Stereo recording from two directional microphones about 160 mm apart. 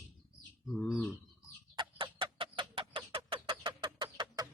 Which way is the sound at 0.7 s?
Centre (ahead or behind).